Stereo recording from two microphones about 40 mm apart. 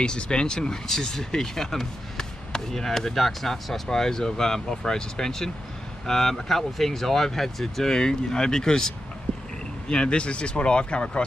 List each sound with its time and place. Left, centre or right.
0.0 s speech: left